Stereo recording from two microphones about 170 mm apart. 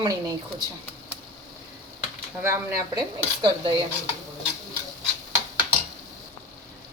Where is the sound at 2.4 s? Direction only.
15° right (ahead or behind).